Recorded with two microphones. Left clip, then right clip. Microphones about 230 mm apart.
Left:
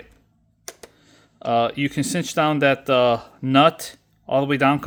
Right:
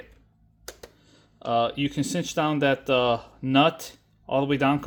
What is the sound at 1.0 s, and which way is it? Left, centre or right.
Speech, left.